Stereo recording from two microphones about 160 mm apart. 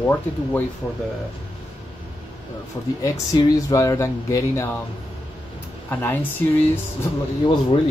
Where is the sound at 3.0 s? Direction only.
20° left (ahead or behind).